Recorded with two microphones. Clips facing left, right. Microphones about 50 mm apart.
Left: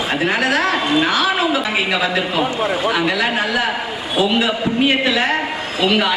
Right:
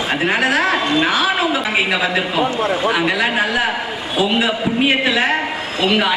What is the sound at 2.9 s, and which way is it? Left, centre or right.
A woman's voice, centre.